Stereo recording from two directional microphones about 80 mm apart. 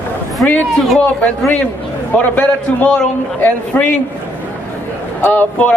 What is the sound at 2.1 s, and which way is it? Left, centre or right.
A man's voice, centre.